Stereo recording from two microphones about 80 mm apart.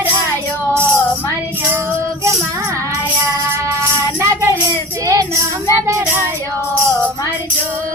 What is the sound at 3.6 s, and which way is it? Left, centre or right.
Music, right.